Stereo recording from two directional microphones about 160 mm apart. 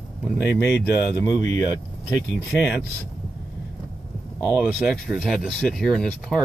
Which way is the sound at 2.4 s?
10° right (ahead or behind).